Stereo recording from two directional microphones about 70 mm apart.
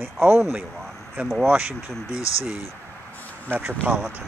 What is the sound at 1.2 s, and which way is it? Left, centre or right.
Speech, right.